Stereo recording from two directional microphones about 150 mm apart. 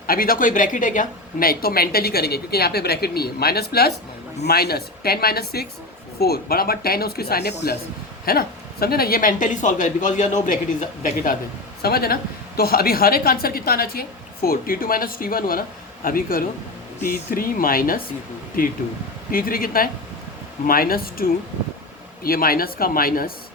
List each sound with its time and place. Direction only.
0.1 s a woman's voice: 75° left (ahead or behind)
11.8 s a woman's voice: 90° left
14.4 s speech: 75° left (ahead or behind)